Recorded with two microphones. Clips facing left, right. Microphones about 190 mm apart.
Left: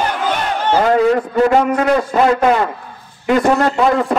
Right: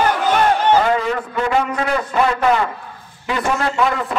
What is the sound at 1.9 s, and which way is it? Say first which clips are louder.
A man's voice: left 5 dB; 35° left (ahead or behind).